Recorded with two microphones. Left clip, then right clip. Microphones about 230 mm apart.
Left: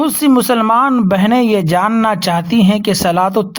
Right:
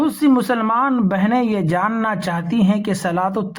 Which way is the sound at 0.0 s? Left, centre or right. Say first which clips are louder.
Left 4 dB; left.